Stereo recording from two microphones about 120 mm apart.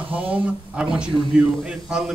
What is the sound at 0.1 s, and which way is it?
Speech, 10° right (ahead or behind).